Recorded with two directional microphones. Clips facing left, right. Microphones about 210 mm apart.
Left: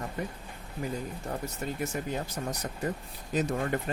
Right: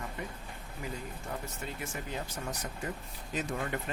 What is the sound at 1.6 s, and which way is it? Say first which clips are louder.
Speech: left 7 dB; 40° left (ahead or behind).